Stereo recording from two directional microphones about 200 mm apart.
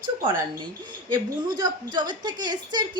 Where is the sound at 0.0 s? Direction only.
25° right (ahead or behind).